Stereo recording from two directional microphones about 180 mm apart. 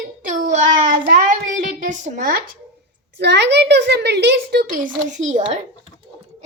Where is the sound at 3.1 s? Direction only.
70° right (ahead or behind).